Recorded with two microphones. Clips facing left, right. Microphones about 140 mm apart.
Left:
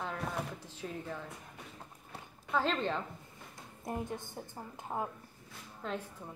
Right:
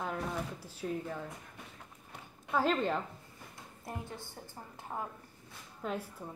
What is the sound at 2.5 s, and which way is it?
Speech, 10° right (ahead or behind).